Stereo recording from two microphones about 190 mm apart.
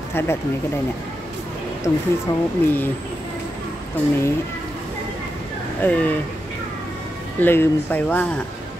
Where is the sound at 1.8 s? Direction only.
15° left (ahead or behind).